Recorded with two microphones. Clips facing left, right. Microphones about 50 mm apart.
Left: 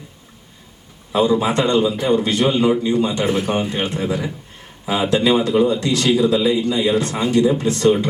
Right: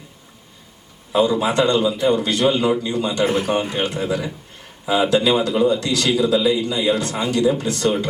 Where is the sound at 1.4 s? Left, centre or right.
Left.